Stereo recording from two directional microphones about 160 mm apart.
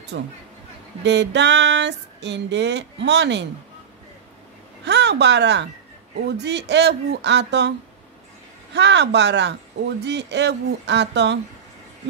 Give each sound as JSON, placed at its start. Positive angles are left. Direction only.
{"t": 0.1, "sound": "speech", "side_deg": -90}
{"t": 4.8, "sound": "speech", "side_deg": -90}
{"t": 8.7, "sound": "speech", "side_deg": -90}